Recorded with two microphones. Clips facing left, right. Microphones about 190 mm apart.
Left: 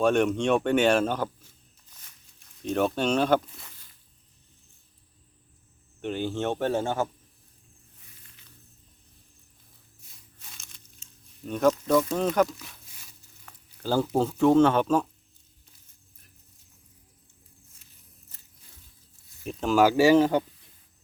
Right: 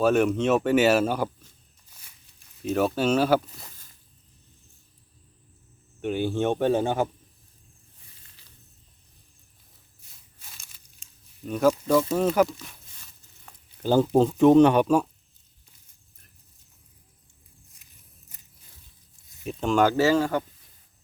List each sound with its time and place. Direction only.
0.0 s speech: 5° right (ahead or behind)
2.6 s speech: 5° right (ahead or behind)
3.6 s a sound: 45° right (ahead or behind)
6.0 s speech: 10° right (ahead or behind)
8.4 s snake: 35° right (ahead or behind)
10.3 s crumpling: 5° right (ahead or behind)
12.4 s speech: 5° right (ahead or behind)
13.4 s speech: 20° right (ahead or behind)
18.3 s a sound: 10° right (ahead or behind)
19.5 s speech: centre (ahead or behind); by 20.4 s 20° left (ahead or behind)